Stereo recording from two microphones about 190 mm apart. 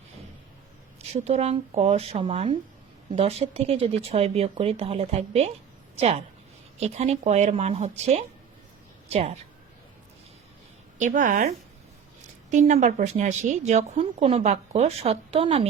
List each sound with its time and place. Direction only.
1.1 s a woman's voice: 35° right (ahead or behind)
10.9 s a woman's voice: 40° right (ahead or behind)
12.5 s speech: 40° right (ahead or behind)